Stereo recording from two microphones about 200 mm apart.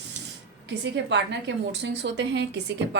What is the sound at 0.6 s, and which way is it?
A woman's voice, 60° right (ahead or behind).